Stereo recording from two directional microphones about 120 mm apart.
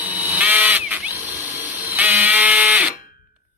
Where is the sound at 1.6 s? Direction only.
15° right (ahead or behind).